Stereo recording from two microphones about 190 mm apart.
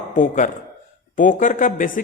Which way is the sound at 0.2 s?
40° left (ahead or behind).